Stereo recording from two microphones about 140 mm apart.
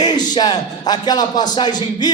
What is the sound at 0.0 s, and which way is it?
A man's voice, 30° left (ahead or behind).